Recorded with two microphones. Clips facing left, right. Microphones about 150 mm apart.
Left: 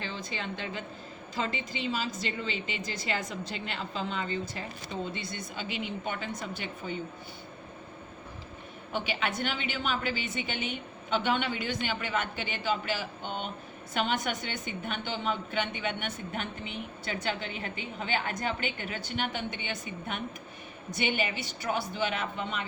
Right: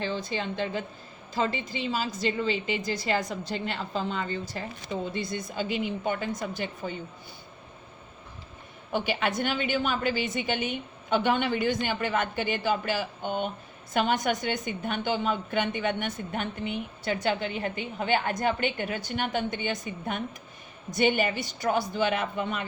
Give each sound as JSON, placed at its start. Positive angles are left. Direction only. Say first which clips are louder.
{"t": 0.0, "sound": "a woman's voice", "louder": "right 6 dB", "side_deg": -35}
{"t": 8.9, "sound": "a woman's voice", "louder": "right 4 dB", "side_deg": -45}